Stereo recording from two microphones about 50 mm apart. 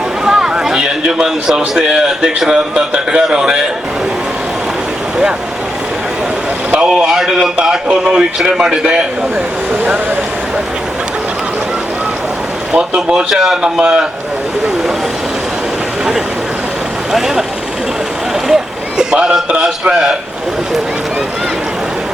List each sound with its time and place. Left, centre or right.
0.3 s a man's voice: centre
6.7 s speech: right
7.1 s a man's voice: centre
12.7 s a man's voice: centre
17.1 s a man's voice: centre
18.4 s a man's voice: centre